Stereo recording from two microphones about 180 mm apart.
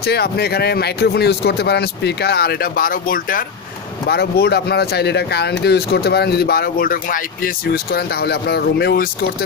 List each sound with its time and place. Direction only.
0.0 s speech: 65° left (ahead or behind)
4.1 s speech: 60° left (ahead or behind)